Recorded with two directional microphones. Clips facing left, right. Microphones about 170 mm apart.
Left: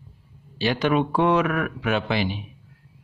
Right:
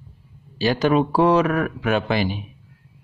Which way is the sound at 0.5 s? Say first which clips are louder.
Right 3 dB; 40° right (ahead or behind).